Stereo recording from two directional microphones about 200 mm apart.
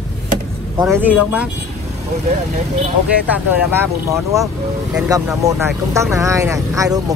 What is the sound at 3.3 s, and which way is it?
Speech, 10° right (ahead or behind).